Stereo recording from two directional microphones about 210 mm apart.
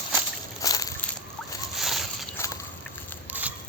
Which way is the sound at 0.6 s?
15° left (ahead or behind).